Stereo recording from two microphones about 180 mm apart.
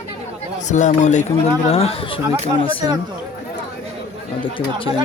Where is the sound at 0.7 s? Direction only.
40° left (ahead or behind).